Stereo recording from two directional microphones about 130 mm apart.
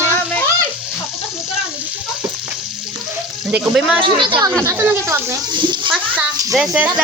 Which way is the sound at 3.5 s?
10° right (ahead or behind).